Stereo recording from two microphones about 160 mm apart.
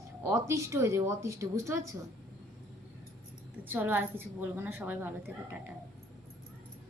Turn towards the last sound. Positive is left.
turn(degrees=-10)  # may be behind; listen again after turning